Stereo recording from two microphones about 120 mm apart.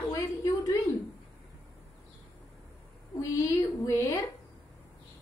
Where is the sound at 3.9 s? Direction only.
25° left (ahead or behind).